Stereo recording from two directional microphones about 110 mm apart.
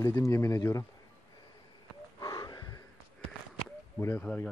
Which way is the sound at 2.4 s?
35° left (ahead or behind).